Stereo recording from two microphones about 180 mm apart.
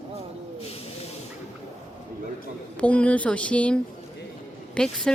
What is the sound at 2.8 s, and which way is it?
Speech, 5° left (ahead or behind).